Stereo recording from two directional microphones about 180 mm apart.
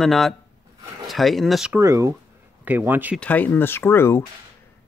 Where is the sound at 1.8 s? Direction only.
15° right (ahead or behind).